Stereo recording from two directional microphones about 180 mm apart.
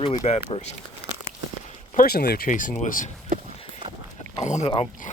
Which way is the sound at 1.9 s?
55° left (ahead or behind).